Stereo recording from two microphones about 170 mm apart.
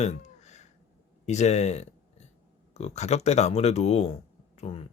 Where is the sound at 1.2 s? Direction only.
40° left (ahead or behind).